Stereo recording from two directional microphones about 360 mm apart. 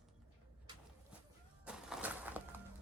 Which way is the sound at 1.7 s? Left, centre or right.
Centre.